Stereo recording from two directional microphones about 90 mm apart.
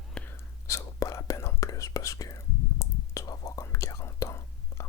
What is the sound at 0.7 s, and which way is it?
Whispering, 35° left (ahead or behind).